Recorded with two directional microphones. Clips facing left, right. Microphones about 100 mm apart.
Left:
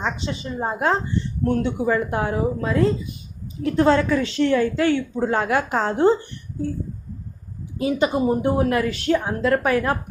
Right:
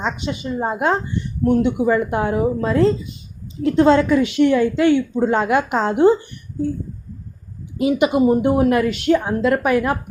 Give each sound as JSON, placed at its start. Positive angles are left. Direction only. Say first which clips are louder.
{"t": 0.0, "sound": "a woman's voice", "louder": "right 3 dB", "side_deg": -20}
{"t": 2.6, "sound": "a woman's voice", "louder": "right 4 dB", "side_deg": -30}
{"t": 7.8, "sound": "a woman's voice", "louder": "right 4 dB", "side_deg": -20}